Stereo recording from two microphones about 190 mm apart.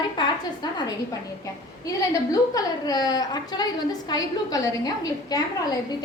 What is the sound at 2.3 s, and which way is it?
A woman's voice, 20° left (ahead or behind).